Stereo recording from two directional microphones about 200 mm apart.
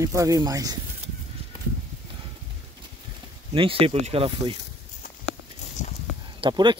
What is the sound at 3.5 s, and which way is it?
Speech, 25° right (ahead or behind).